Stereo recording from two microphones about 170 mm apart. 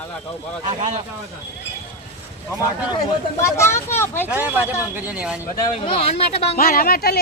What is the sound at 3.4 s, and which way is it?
Speech, 15° left (ahead or behind).